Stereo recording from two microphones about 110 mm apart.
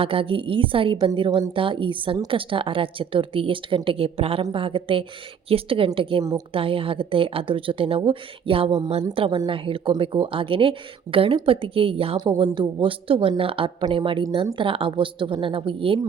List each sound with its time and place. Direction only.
0.0 s a woman's voice: 55° right (ahead or behind)